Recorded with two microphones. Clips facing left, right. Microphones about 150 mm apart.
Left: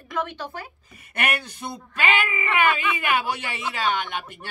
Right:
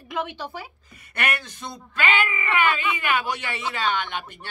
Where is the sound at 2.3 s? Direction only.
25° left (ahead or behind).